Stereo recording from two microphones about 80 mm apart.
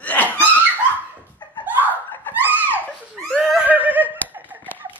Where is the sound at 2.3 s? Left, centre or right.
Left.